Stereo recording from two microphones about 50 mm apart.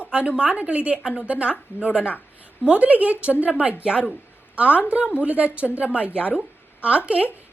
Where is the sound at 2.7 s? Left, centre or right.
Right.